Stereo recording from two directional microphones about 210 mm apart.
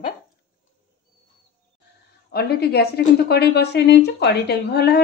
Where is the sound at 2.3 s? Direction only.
50° left (ahead or behind).